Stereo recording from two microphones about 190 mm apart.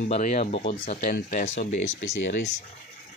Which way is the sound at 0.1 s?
40° left (ahead or behind).